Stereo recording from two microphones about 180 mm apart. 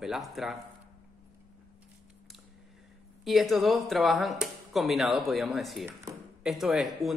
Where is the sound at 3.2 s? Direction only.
Centre (ahead or behind).